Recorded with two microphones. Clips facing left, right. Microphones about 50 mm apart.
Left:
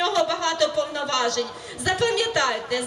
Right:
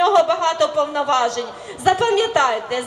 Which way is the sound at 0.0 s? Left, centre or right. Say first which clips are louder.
Right 7 dB; right.